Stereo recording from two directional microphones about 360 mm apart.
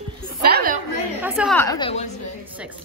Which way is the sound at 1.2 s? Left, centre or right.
Centre.